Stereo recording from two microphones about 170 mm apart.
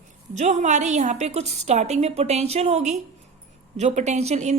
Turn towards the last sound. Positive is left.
turn(degrees=-40)  # may be behind; listen again after turning